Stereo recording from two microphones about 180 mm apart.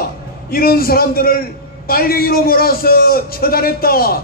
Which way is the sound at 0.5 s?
55° left (ahead or behind).